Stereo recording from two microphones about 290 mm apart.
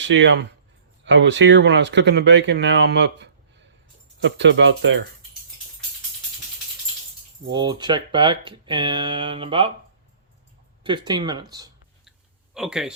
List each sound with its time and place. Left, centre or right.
0.0 s speech: right
7.4 s speech: centre
10.8 s speech: centre
12.5 s speech: centre